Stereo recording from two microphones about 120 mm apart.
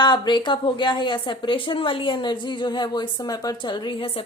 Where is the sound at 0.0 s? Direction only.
40° left (ahead or behind).